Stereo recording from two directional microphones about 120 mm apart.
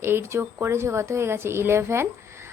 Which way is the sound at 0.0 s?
20° right (ahead or behind).